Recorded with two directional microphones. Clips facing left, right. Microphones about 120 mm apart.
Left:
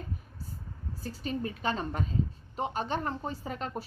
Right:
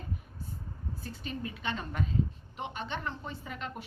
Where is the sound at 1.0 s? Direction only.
35° left (ahead or behind).